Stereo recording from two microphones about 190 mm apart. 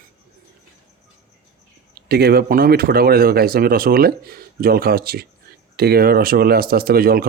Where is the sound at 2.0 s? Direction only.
55° right (ahead or behind).